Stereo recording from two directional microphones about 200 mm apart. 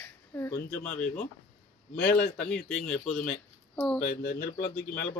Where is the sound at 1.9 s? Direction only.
55° left (ahead or behind).